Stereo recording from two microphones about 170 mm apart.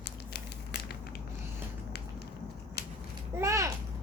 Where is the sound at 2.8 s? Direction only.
70° left (ahead or behind).